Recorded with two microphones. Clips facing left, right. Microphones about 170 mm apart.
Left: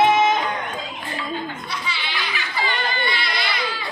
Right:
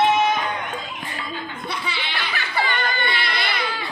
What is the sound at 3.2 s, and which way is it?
Baby cry, 60° right (ahead or behind).